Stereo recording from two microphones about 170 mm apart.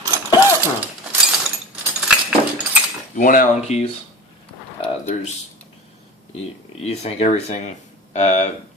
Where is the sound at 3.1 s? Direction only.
50° left (ahead or behind).